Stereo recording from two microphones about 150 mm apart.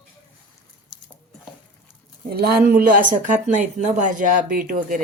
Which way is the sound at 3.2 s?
60° right (ahead or behind).